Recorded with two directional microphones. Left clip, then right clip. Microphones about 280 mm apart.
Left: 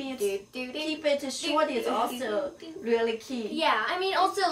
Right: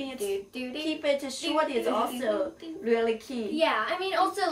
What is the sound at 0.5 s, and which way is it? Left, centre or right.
A child's voice, centre.